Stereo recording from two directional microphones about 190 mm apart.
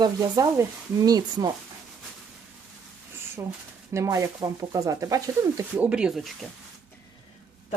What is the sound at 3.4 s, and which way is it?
Speech, 15° right (ahead or behind).